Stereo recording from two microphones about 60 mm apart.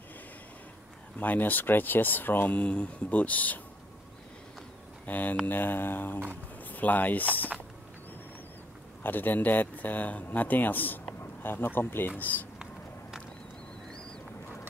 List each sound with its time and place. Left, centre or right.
1.1 s speech: left
5.0 s speech: left
5.5 s mantra: left
6.7 s speech: left
9.0 s speech: left
11.4 s mantra: left
12.2 s speech: left